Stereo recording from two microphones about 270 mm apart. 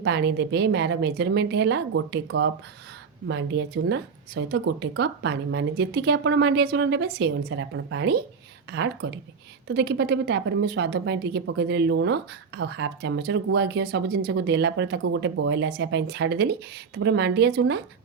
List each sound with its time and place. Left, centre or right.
0.0 s a woman's voice: right